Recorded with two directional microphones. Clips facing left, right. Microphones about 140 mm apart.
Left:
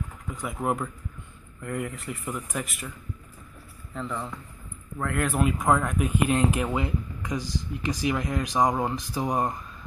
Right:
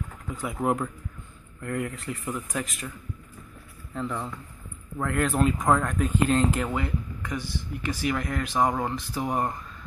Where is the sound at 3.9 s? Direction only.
Centre (ahead or behind).